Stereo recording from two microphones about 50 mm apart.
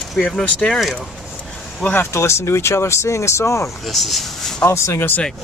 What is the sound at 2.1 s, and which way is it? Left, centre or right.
Speech, left.